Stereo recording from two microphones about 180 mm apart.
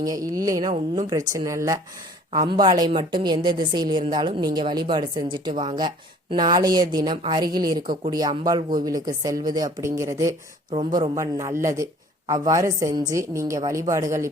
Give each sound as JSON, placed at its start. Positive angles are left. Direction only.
{"t": 0.0, "sound": "a woman's voice", "side_deg": -20}
{"t": 10.7, "sound": "speech", "side_deg": -35}
{"t": 10.9, "sound": "a woman's voice", "side_deg": -20}